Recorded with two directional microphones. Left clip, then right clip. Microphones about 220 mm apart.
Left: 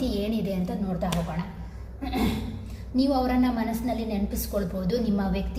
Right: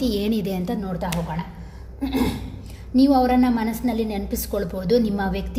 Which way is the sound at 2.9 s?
50° right (ahead or behind).